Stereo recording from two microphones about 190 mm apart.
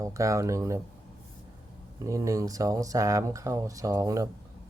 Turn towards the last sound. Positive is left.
turn(degrees=-20)  # may be behind; listen again after turning